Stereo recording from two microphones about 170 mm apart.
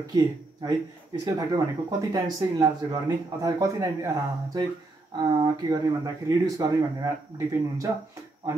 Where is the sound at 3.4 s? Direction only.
20° right (ahead or behind).